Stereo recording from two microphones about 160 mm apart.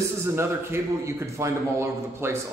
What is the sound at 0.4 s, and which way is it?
A man's voice, 15° right (ahead or behind).